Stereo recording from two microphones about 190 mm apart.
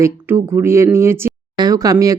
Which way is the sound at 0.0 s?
15° right (ahead or behind).